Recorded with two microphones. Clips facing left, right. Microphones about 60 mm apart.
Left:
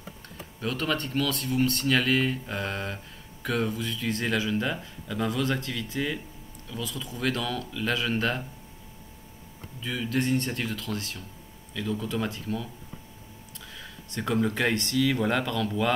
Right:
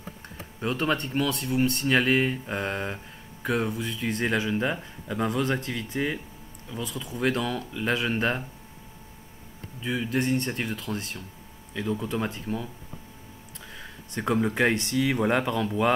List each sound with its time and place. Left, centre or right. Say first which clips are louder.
0.6 s speech: right 2 dB; right
9.8 s speech: right 3 dB; right
10.1 s speech: left 1 dB; centre
10.8 s speech: right 1 dB; centre
13.7 s speech: right 1 dB; right